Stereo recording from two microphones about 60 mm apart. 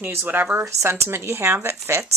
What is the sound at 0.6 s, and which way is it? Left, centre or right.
Speech, right.